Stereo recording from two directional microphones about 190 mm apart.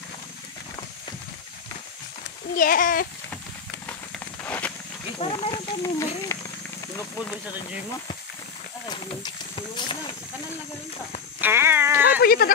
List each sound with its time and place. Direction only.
2.5 s speech: 45° left (ahead or behind)
4.4 s a sound: 10° left (ahead or behind)
5.2 s speech: 25° left (ahead or behind)
8.8 s speech: 20° left (ahead or behind)
11.4 s dog: 10° right (ahead or behind)
12.2 s speech: 55° left (ahead or behind)